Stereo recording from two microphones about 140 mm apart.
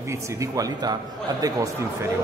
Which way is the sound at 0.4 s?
25° right (ahead or behind).